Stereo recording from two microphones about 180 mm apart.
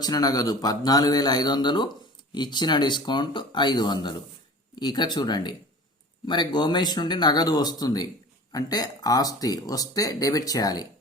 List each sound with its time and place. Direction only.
0.0 s speech: 20° left (ahead or behind)